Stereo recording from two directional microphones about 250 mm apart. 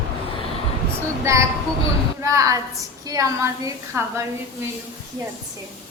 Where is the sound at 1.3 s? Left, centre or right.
Centre.